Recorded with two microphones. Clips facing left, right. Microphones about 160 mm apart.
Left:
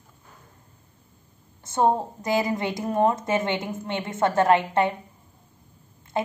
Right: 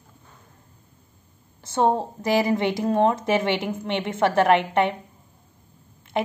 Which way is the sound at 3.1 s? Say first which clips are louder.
Right 3 dB; 70° right (ahead or behind).